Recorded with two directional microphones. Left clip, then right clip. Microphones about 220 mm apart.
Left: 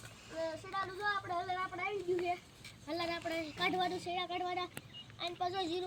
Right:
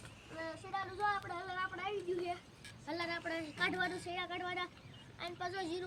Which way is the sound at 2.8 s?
10° right (ahead or behind).